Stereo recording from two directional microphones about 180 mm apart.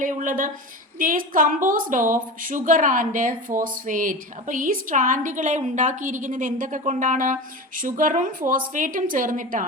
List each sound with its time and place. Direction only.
0.0 s a woman's voice: 50° right (ahead or behind)